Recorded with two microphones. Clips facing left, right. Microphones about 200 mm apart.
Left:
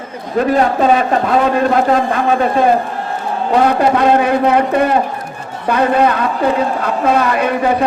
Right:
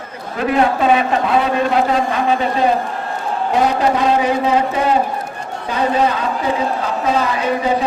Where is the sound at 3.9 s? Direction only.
60° left (ahead or behind).